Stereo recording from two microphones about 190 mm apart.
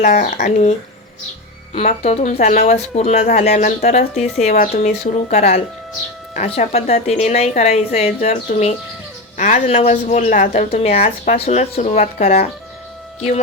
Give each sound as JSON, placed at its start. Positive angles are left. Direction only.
{"t": 0.0, "sound": "a woman's voice", "side_deg": 40}
{"t": 1.7, "sound": "a woman's voice", "side_deg": 35}